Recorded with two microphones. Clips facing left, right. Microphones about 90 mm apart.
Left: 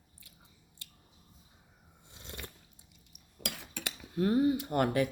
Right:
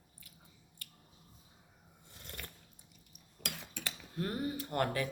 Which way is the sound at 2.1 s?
20° left (ahead or behind).